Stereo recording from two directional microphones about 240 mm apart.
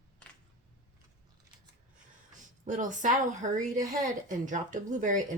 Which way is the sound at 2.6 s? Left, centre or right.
Right.